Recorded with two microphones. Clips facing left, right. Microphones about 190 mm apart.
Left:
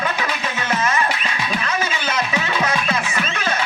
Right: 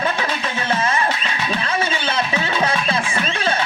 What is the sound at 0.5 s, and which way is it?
Music, 30° right (ahead or behind).